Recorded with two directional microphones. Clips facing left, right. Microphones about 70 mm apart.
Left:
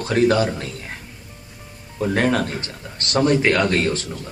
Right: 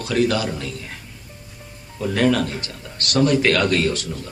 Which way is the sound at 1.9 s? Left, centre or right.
Left.